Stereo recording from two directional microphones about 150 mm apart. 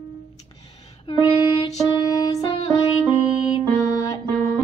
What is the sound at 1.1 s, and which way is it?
Music, 35° left (ahead or behind).